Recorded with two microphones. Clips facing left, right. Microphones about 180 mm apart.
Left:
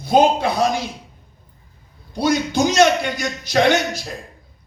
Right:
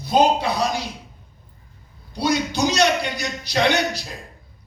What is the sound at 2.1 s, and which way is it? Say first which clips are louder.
Speech: left 3 dB; 50° left (ahead or behind).